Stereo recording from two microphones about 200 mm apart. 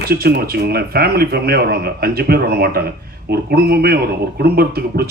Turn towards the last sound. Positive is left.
turn(degrees=-50)  # may be behind; listen again after turning